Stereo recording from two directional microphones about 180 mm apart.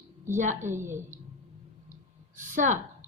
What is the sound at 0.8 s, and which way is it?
Speech, 15° right (ahead or behind).